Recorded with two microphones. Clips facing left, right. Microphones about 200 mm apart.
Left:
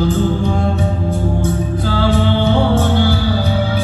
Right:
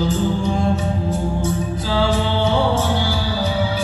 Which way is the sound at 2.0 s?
55° left (ahead or behind).